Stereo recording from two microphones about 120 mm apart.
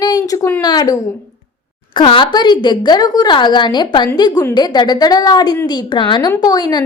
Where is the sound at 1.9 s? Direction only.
45° left (ahead or behind).